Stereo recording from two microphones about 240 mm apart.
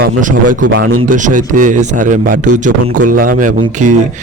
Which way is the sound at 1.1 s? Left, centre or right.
Right.